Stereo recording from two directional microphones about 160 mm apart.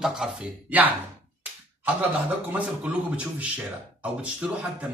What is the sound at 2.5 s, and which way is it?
Speech, 10° right (ahead or behind).